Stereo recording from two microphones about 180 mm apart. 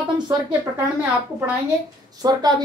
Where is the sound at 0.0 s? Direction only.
25° right (ahead or behind).